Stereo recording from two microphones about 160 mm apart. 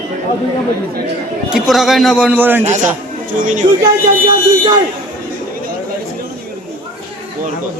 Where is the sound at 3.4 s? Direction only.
55° right (ahead or behind).